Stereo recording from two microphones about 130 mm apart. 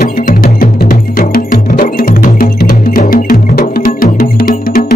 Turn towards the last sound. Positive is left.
turn(degrees=90)